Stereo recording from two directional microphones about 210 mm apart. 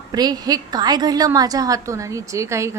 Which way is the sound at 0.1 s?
20° right (ahead or behind).